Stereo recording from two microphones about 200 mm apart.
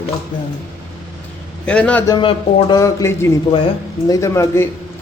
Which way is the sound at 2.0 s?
25° left (ahead or behind).